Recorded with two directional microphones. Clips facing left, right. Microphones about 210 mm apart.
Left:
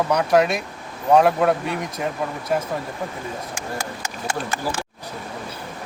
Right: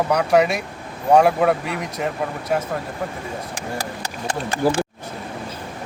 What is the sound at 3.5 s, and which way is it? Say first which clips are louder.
Speech: right 1 dB; 35° right (ahead or behind).